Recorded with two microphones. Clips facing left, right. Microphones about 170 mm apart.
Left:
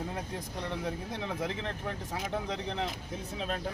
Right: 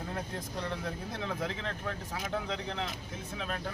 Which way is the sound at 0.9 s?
15° left (ahead or behind).